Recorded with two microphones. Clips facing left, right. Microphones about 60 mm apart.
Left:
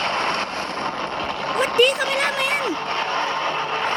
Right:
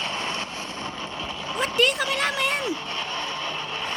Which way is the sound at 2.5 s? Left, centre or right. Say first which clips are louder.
Left 4 dB; left.